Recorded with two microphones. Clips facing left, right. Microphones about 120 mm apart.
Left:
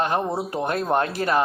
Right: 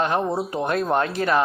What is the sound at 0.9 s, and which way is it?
Speech, 35° left (ahead or behind).